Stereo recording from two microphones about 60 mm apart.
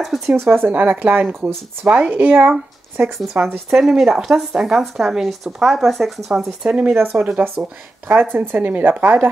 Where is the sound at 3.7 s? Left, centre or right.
Centre.